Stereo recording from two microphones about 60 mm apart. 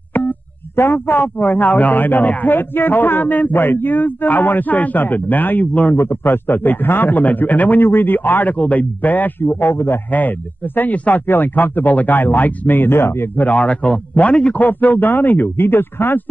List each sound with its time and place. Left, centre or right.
0.7 s a man's voice: left
5.9 s a man's voice: left
10.8 s a man's voice: left